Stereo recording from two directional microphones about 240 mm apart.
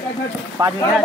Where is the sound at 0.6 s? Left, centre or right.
Centre.